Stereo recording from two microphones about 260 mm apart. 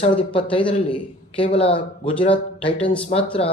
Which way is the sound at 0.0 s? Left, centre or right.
Centre.